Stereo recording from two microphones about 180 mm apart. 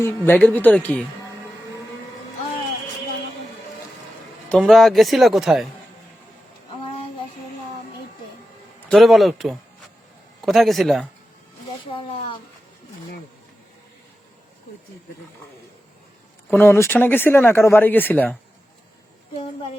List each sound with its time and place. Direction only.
0.0 s speech: 10° left (ahead or behind)
4.4 s speech: centre (ahead or behind)
8.9 s speech: centre (ahead or behind)
11.9 s speech: 30° left (ahead or behind)
16.5 s speech: 10° left (ahead or behind)